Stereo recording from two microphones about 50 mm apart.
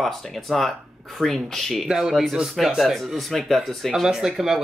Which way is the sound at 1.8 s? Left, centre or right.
Centre.